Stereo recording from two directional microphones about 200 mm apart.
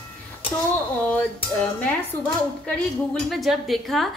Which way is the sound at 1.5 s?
5° left (ahead or behind).